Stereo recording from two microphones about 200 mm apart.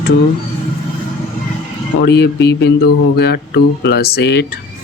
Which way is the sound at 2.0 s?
55° left (ahead or behind).